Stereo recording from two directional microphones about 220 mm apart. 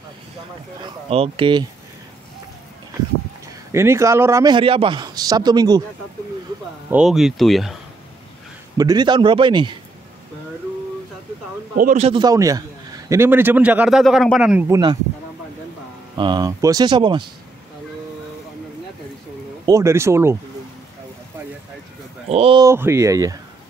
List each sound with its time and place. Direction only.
1.0 s a man's voice: 25° right (ahead or behind)
3.7 s a man's voice: 10° right (ahead or behind)
6.9 s a man's voice: 5° right (ahead or behind)
8.7 s a man's voice: 20° right (ahead or behind)
11.8 s a man's voice: 30° right (ahead or behind); by 14.8 s 5° right (ahead or behind)
16.2 s a man's voice: 20° right (ahead or behind)
19.6 s a man's voice: 15° right (ahead or behind)
22.3 s a man's voice: 25° right (ahead or behind)
22.7 s a man's voice: 10° right (ahead or behind)